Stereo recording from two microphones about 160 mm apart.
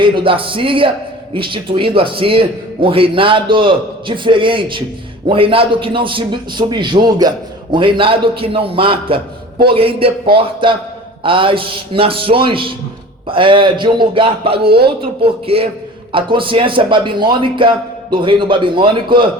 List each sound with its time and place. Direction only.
0.0 s a man's voice: 30° right (ahead or behind)
14.6 s speech: 80° right
14.8 s a man's voice: 35° right (ahead or behind)